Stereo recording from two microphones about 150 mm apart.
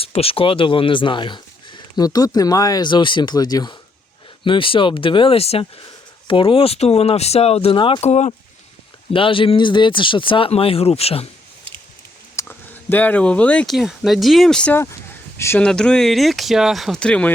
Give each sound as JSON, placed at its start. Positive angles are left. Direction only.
{"t": 0.0, "sound": "speech", "side_deg": 40}
{"t": 9.1, "sound": "speech", "side_deg": 35}
{"t": 12.4, "sound": "speech", "side_deg": 10}
{"t": 15.6, "sound": "speech", "side_deg": 5}